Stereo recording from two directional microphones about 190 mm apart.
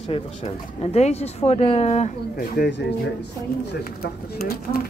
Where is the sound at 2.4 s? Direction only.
55° left (ahead or behind).